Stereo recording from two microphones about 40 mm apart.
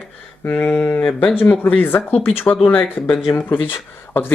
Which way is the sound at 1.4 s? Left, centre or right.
Left.